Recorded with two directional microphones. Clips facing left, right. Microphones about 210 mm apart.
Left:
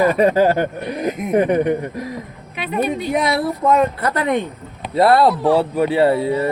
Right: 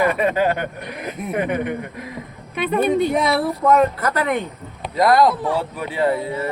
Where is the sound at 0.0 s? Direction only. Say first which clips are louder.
Left 4 dB; 35° left (ahead or behind).